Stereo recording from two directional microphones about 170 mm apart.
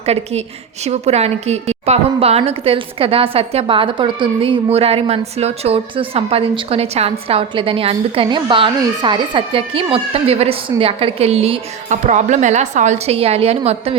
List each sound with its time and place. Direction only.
0.0 s a woman's voice: 40° right (ahead or behind)